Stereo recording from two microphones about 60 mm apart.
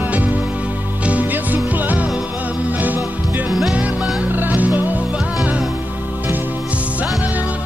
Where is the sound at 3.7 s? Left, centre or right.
Right.